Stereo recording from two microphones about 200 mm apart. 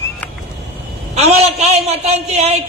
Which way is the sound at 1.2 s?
30° right (ahead or behind).